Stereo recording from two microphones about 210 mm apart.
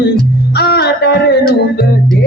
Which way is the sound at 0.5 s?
50° left (ahead or behind).